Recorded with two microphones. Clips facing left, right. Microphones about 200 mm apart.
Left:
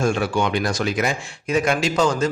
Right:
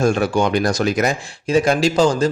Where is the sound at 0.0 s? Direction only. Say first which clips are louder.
Right 4 dB; 40° right (ahead or behind).